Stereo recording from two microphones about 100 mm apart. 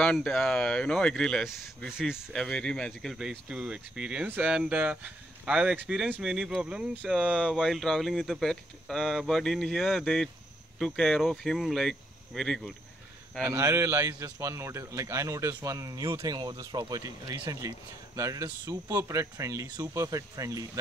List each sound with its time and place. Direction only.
0.0 s speech: 5° left (ahead or behind)
2.3 s speech: 10° left (ahead or behind)
3.2 s speech: 5° right (ahead or behind)
13.4 s speech: 30° right (ahead or behind)